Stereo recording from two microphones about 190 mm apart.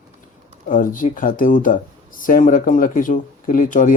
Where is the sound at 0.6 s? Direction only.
45° left (ahead or behind).